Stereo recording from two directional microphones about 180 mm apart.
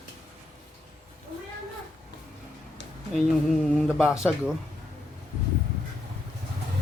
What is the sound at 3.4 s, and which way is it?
Speech, centre (ahead or behind).